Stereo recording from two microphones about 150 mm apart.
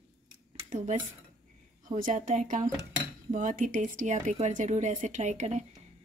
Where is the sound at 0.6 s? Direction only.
50° right (ahead or behind).